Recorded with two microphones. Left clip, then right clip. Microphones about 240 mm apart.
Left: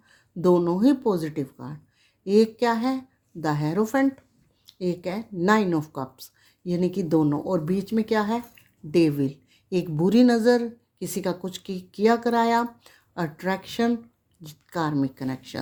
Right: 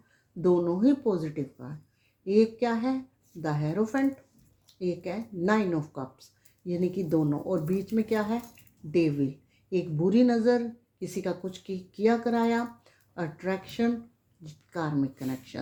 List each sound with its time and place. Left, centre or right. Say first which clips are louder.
0.4 s a woman's voice: left 4 dB; left